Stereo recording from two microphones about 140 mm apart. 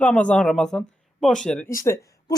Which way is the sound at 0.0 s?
10° left (ahead or behind).